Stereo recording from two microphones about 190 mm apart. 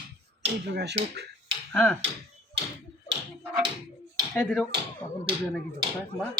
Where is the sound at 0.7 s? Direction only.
60° right (ahead or behind).